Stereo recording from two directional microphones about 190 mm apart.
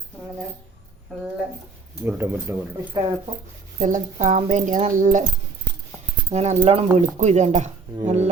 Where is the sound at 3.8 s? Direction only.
40° right (ahead or behind).